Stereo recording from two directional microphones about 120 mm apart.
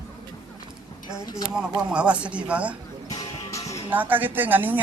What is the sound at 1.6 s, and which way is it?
A woman's voice, 10° right (ahead or behind).